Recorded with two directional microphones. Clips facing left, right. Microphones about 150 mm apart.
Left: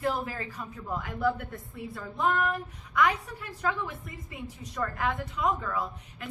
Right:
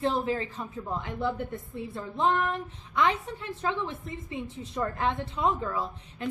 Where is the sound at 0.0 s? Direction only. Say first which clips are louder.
Right 3 dB; 25° right (ahead or behind).